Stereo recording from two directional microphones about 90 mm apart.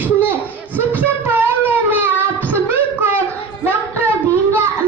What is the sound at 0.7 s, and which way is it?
Child singing, 20° right (ahead or behind).